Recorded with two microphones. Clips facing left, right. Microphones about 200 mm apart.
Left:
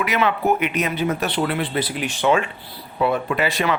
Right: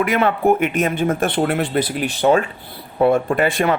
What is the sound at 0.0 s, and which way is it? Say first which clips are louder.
Speech: right 4 dB; 50° right (ahead or behind).